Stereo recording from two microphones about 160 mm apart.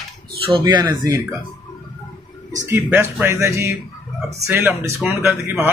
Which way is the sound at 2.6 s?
15° right (ahead or behind).